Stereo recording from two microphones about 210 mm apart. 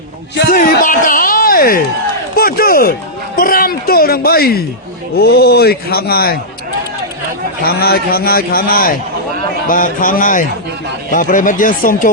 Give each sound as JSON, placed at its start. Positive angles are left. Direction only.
{"t": 0.3, "sound": "a man's voice", "side_deg": 40}
{"t": 7.6, "sound": "a man's voice", "side_deg": 45}